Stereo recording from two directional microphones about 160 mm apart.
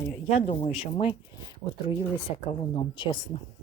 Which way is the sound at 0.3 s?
40° left (ahead or behind).